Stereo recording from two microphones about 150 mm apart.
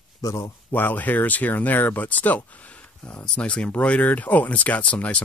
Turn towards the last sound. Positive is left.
turn(degrees=10)  # may be behind; listen again after turning